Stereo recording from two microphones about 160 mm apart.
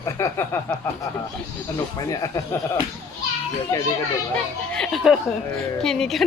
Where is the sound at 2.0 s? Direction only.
20° left (ahead or behind).